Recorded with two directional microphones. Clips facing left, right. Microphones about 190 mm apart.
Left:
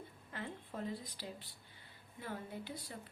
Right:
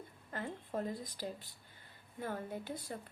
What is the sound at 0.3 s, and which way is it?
A woman's voice, 45° right (ahead or behind).